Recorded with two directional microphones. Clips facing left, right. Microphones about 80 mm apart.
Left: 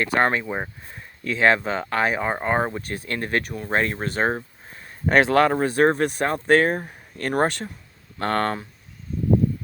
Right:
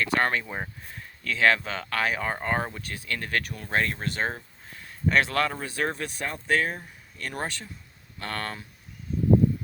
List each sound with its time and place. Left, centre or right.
0.0 s speech: left
3.7 s speech: left